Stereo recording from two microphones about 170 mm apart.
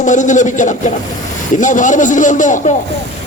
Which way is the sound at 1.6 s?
50° left (ahead or behind).